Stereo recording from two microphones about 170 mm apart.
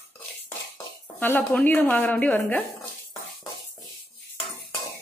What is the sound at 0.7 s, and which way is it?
Speech, 10° left (ahead or behind).